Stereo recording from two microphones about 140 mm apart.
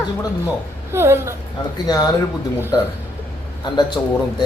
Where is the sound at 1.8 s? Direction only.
30° left (ahead or behind).